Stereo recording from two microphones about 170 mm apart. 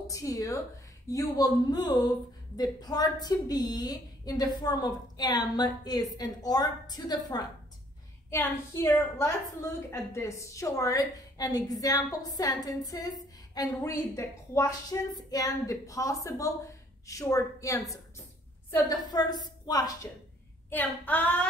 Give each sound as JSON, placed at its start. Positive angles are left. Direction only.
{"t": 0.0, "sound": "a woman's voice", "side_deg": 20}
{"t": 8.3, "sound": "female singing", "side_deg": 15}
{"t": 9.2, "sound": "a woman's voice", "side_deg": 15}
{"t": 20.7, "sound": "female singing", "side_deg": 10}